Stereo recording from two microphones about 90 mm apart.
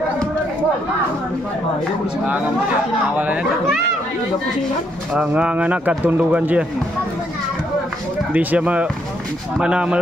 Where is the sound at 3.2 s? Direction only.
15° right (ahead or behind).